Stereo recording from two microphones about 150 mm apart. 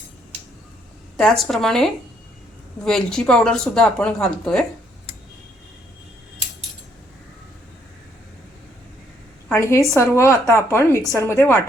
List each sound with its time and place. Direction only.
1.1 s speech: centre (ahead or behind)
9.5 s a woman's voice: 20° left (ahead or behind)